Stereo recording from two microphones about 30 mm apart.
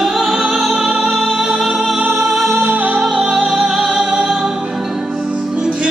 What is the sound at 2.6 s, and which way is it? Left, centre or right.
Music, right.